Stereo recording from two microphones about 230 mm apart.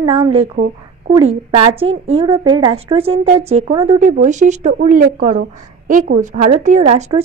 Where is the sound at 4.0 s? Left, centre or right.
Right.